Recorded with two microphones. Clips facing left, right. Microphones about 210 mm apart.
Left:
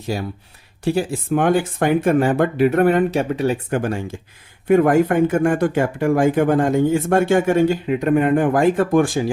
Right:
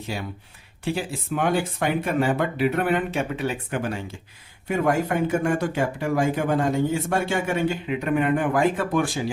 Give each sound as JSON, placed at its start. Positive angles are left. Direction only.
{"t": 0.1, "sound": "speech", "side_deg": 40}